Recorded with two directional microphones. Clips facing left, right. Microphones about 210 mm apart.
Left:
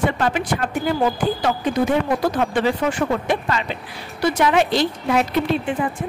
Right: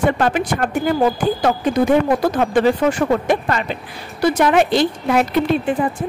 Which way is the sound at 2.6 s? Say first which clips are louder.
Right 7 dB; 45° right (ahead or behind).